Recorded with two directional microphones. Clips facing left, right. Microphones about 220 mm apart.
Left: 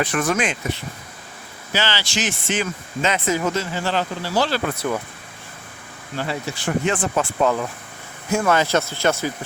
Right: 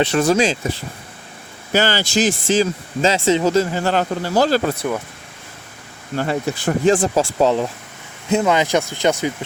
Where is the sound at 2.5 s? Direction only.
30° right (ahead or behind).